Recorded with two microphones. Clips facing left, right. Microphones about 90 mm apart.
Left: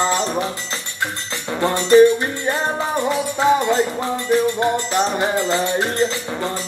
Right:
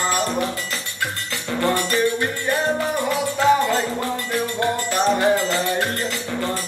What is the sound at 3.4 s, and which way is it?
Music, 20° left (ahead or behind).